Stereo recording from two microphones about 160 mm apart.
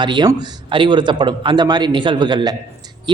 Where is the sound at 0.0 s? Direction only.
30° right (ahead or behind).